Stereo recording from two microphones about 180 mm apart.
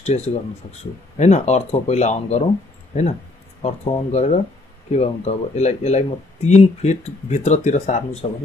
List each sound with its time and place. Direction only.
0.0 s speech: 40° left (ahead or behind)